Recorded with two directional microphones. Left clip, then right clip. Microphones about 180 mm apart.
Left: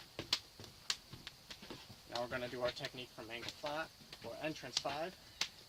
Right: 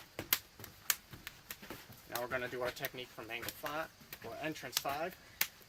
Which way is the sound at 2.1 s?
Centre (ahead or behind).